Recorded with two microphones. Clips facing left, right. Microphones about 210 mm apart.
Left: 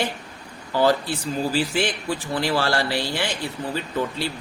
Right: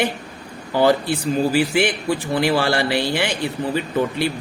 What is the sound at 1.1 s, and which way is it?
Speech, 60° right (ahead or behind).